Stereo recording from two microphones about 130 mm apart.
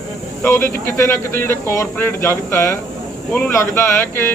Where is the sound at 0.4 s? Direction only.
20° left (ahead or behind).